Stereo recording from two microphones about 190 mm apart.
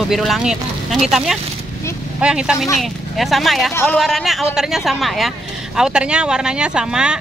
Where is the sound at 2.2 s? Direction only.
5° right (ahead or behind).